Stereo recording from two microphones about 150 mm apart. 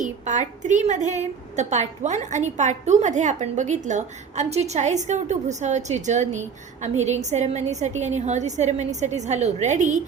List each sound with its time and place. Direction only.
0.0 s a woman's voice: 55° right (ahead or behind)